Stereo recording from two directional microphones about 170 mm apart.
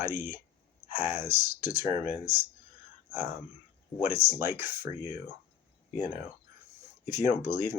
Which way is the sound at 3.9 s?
15° right (ahead or behind).